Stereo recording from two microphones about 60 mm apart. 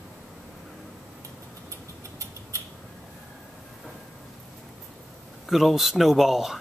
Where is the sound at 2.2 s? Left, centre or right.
Right.